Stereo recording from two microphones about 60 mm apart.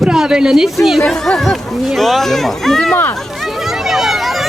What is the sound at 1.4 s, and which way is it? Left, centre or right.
Speech, centre.